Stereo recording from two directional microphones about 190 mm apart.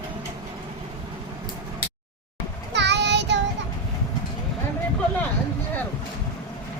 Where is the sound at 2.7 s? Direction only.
65° right (ahead or behind).